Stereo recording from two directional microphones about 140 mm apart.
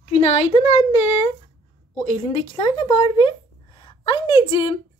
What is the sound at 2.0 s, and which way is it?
A child's voice, 35° left (ahead or behind).